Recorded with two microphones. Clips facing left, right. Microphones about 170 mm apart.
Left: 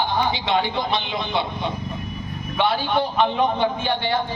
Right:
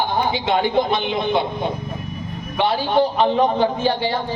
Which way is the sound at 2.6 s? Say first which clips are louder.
Right 4 dB; 35° right (ahead or behind).